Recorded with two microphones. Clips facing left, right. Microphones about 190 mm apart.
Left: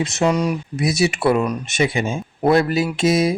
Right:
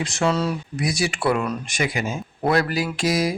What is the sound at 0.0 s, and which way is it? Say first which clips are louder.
Speech: left 3 dB; 20° left (ahead or behind).